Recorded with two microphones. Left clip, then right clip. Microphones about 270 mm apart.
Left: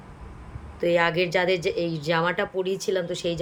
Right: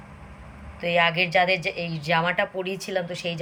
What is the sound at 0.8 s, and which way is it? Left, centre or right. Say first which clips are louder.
Speech: even; centre.